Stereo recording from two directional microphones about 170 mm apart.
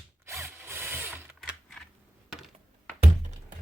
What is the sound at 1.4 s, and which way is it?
Typing, centre (ahead or behind).